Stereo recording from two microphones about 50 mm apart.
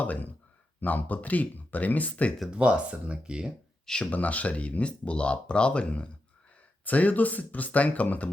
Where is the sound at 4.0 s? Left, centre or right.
Left.